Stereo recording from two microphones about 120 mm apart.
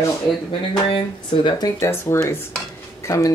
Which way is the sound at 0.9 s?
40° left (ahead or behind).